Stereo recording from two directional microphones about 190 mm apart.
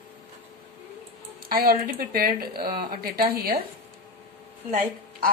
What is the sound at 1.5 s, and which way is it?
Speech, 50° right (ahead or behind).